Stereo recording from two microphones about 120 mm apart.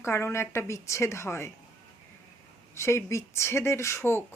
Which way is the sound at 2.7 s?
25° left (ahead or behind).